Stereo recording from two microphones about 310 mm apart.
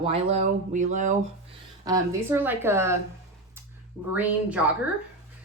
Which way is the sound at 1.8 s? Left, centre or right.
Centre.